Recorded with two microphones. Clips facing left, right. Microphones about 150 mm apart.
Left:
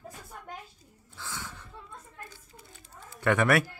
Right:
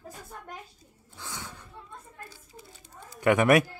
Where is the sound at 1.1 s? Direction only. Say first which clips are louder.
Even; 20° right (ahead or behind).